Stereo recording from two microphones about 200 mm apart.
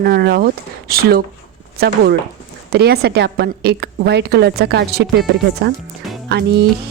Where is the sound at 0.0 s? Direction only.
50° right (ahead or behind).